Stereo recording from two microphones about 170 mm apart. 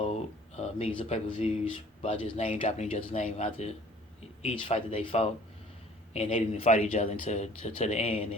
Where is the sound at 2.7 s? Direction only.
45° left (ahead or behind).